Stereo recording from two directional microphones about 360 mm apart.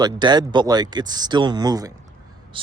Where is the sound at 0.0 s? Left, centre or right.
Centre.